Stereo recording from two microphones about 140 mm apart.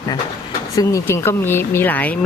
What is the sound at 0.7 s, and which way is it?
Speech, 20° left (ahead or behind).